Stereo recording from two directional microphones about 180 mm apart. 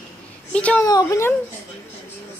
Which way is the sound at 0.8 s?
20° left (ahead or behind).